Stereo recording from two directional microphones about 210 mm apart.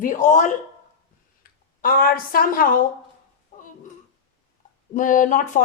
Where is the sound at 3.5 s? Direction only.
35° left (ahead or behind).